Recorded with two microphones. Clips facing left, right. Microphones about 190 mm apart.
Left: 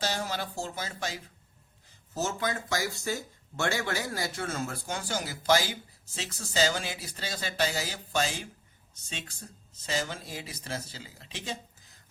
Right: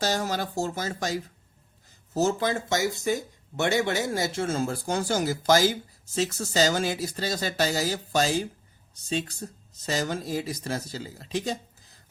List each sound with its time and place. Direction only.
0.0 s speech: 45° right (ahead or behind)
2.1 s speech: 30° right (ahead or behind)